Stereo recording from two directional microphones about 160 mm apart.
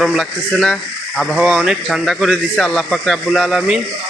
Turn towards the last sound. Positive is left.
turn(degrees=0)  # may be behind; listen again after turning